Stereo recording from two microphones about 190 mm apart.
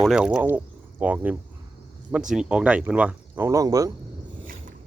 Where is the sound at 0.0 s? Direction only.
5° right (ahead or behind).